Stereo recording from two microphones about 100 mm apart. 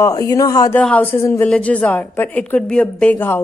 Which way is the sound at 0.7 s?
15° left (ahead or behind).